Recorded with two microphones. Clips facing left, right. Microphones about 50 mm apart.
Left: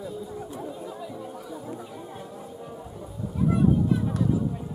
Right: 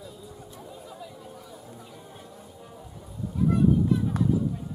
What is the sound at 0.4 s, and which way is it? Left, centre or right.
Chatter, left.